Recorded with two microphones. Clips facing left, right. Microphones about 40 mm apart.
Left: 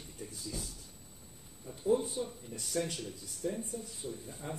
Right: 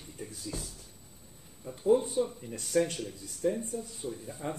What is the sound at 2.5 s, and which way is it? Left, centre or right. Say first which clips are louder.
Speech: right 7 dB; right.